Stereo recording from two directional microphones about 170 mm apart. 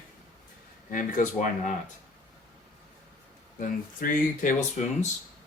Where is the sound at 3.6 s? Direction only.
55° left (ahead or behind).